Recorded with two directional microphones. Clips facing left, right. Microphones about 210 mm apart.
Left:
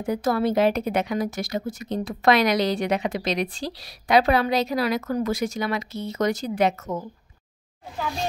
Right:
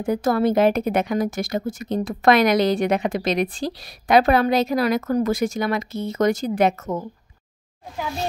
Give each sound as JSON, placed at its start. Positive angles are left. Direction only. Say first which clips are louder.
{"t": 0.0, "sound": "a woman's voice", "louder": "right 3 dB", "side_deg": -50}